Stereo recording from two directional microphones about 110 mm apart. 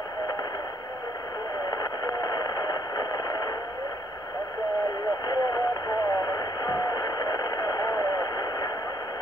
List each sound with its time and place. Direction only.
1.7 s radio: 35° left (ahead or behind)
5.2 s radio: 35° left (ahead or behind)